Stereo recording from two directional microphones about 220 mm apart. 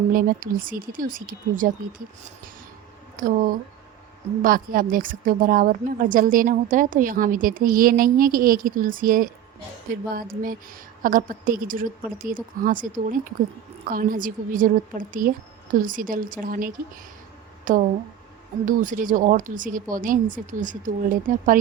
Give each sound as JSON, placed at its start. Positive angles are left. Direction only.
{"t": 0.1, "sound": "a woman's voice", "side_deg": -40}
{"t": 3.2, "sound": "a woman's voice", "side_deg": -40}